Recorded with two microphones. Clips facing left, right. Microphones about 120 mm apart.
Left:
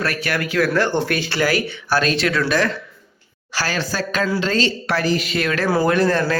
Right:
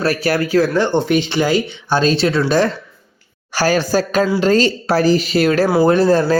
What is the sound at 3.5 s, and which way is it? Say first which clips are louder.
Speech: right 9 dB; 45° right (ahead or behind).